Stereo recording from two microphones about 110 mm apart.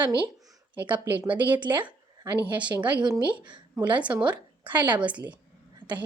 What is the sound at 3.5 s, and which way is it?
Speech, 45° right (ahead or behind).